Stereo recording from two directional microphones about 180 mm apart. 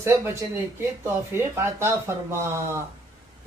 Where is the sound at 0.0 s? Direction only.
15° right (ahead or behind).